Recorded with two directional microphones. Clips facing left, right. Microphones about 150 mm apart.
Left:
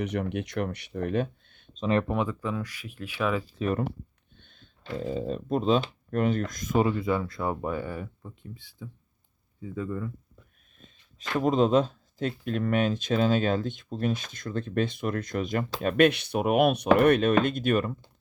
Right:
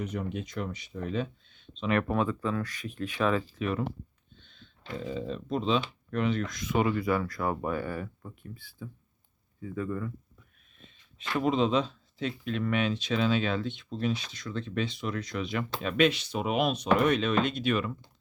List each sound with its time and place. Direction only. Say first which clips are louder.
0.0 s speech: left 4 dB; 75° left (ahead or behind); by 1.8 s 55° left (ahead or behind)
1.8 s speech: left 2 dB; 30° left (ahead or behind)
2.0 s speech: even; 15° left (ahead or behind)
3.6 s speech: left 3 dB; 40° left (ahead or behind)
6.8 s speech: left 1 dB; 25° left (ahead or behind)
10.8 s a sound: left 1 dB; 40° left (ahead or behind)
12.5 s speech: left 3 dB; 45° left (ahead or behind)